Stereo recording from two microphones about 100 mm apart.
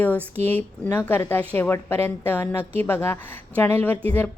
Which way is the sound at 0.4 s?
20° left (ahead or behind).